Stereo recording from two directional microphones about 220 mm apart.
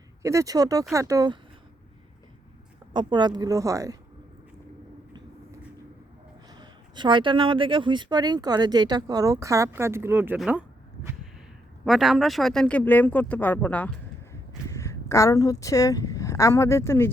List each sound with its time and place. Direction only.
0.2 s speech: 15° right (ahead or behind)
2.9 s speech: 20° right (ahead or behind)
6.6 s speech: 20° right (ahead or behind); by 17.1 s 10° left (ahead or behind)